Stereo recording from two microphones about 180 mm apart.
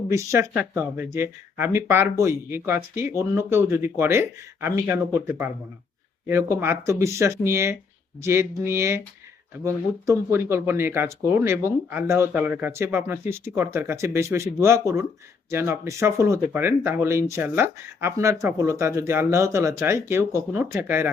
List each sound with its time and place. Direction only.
0.1 s speech: 15° right (ahead or behind)
6.2 s speech: 15° right (ahead or behind)